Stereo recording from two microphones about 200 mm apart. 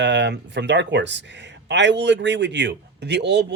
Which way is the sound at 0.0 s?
60° right (ahead or behind).